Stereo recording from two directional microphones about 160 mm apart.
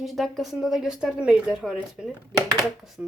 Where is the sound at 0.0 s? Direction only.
Centre (ahead or behind).